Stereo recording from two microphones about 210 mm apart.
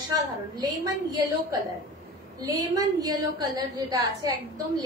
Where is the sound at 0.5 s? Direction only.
15° right (ahead or behind).